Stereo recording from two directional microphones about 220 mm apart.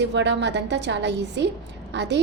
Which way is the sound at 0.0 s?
50° right (ahead or behind).